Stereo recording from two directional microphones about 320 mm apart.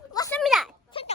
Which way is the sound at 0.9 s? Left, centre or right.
Centre.